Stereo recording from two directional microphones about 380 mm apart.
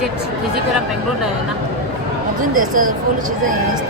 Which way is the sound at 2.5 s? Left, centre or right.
Right.